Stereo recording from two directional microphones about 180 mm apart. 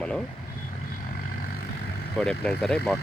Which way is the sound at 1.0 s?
55° left (ahead or behind).